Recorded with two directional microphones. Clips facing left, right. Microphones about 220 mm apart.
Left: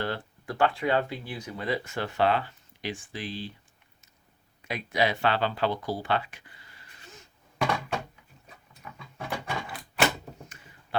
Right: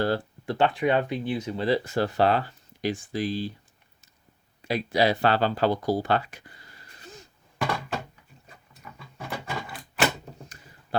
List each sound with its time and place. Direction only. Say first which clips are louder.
0.0 s speech: right 7 dB; 35° right (ahead or behind)
0.5 s speech: right 2 dB; 20° right (ahead or behind); by 3.5 s 40° right (ahead or behind)
4.6 s speech: right 4 dB; 35° right (ahead or behind)
7.6 s door: even; 5° right (ahead or behind)
8.8 s a sound: left 1 dB; centre (ahead or behind)
10.5 s a sound: right 2 dB; 40° right (ahead or behind)